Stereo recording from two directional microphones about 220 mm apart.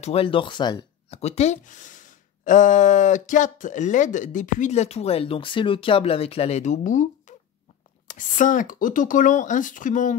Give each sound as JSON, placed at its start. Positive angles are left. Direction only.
{"t": 0.0, "sound": "speech", "side_deg": 25}